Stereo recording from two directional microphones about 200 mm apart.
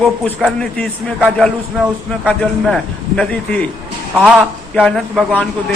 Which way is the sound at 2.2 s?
5° left (ahead or behind).